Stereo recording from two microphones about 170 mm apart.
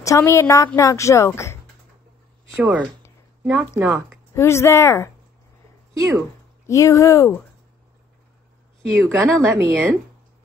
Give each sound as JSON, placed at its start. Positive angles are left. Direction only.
{"t": 0.0, "sound": "a woman's voice", "side_deg": 15}
{"t": 2.5, "sound": "a woman's voice", "side_deg": -15}
{"t": 4.4, "sound": "a woman's voice", "side_deg": 15}
{"t": 5.9, "sound": "speech", "side_deg": -20}
{"t": 6.7, "sound": "a woman's voice", "side_deg": 20}
{"t": 8.9, "sound": "a woman's voice", "side_deg": -15}